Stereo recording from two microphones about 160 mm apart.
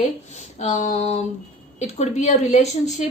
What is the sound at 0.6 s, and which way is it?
A woman's voice, 45° left (ahead or behind).